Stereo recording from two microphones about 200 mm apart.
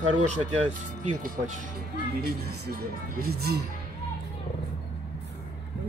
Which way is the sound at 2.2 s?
55° right (ahead or behind).